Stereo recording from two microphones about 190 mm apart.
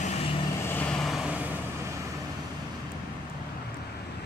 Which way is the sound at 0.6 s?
5° left (ahead or behind).